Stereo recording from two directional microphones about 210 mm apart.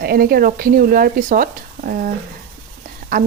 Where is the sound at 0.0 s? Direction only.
45° right (ahead or behind).